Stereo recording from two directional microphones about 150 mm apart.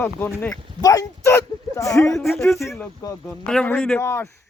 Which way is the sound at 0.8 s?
20° left (ahead or behind).